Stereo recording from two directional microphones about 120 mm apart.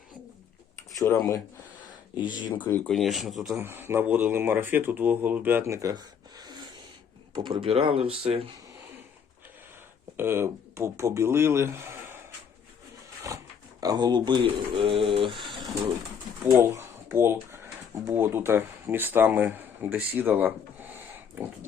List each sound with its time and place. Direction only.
0.9 s speech: 30° left (ahead or behind)
2.9 s speech: centre (ahead or behind)
3.6 s speech: 20° right (ahead or behind); by 8.5 s 50° right (ahead or behind)
10.2 s speech: 20° right (ahead or behind)
13.8 s speech: 35° right (ahead or behind)
15.4 s pigeon: 45° right (ahead or behind)
16.5 s speech: 20° right (ahead or behind)